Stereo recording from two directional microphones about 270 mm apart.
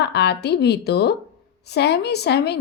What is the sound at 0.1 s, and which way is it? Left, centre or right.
Speech, left.